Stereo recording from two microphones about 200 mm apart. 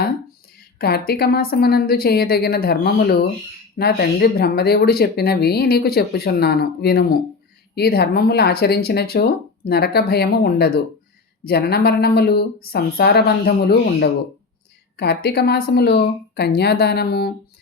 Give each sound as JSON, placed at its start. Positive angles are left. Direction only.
{"t": 0.5, "sound": "a woman's voice", "side_deg": 50}